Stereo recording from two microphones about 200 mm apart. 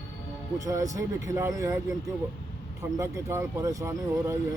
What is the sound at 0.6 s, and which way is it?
Speech, 15° right (ahead or behind).